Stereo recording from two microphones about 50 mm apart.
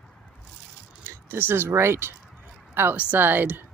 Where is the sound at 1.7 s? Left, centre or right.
Right.